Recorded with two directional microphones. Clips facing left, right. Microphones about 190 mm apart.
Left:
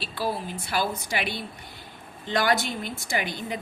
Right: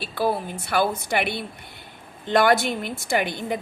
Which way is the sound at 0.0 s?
55° right (ahead or behind).